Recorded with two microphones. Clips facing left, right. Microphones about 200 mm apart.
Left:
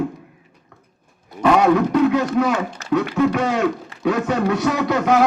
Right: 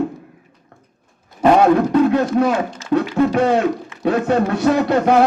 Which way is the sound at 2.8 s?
65° left (ahead or behind).